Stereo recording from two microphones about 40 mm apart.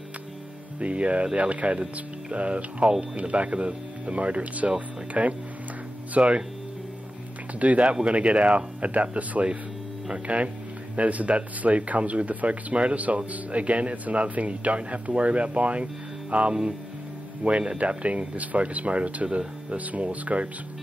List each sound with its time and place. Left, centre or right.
0.7 s speech: right
7.6 s speech: right